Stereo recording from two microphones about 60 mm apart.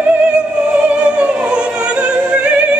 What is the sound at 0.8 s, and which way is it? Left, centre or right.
Opera, right.